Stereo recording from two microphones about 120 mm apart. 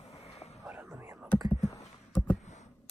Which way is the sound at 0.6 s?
25° right (ahead or behind).